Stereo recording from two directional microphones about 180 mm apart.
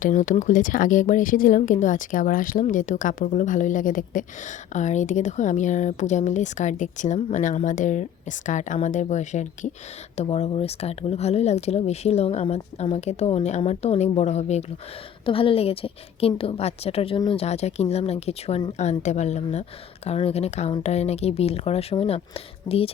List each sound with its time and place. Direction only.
0.0 s speech: 45° left (ahead or behind)